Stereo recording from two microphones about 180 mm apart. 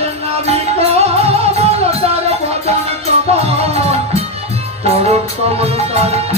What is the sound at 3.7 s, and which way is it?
Music, 35° right (ahead or behind).